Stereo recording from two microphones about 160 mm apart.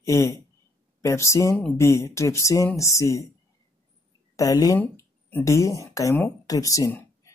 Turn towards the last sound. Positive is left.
turn(degrees=20)  # may be behind; listen again after turning